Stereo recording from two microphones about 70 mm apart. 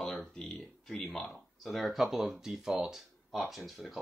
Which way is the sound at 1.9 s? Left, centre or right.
Centre.